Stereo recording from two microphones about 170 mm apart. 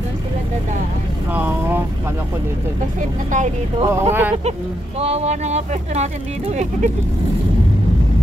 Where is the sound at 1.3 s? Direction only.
10° right (ahead or behind).